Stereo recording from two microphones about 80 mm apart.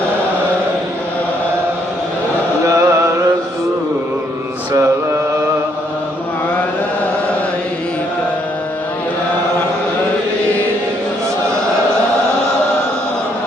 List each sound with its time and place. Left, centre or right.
2.6 s music: right